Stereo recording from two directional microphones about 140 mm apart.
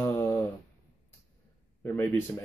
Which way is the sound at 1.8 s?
15° left (ahead or behind).